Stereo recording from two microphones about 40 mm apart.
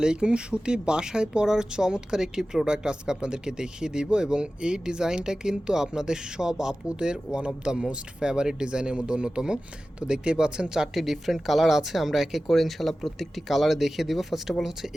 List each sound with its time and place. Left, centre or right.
0.0 s speech: right
10.9 s speech: centre